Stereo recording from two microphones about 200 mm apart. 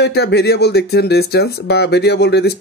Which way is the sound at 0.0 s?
55° left (ahead or behind).